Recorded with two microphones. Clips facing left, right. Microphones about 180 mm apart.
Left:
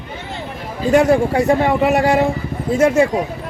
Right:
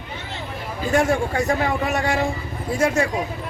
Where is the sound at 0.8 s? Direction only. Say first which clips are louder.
Left 7 dB; 30° left (ahead or behind).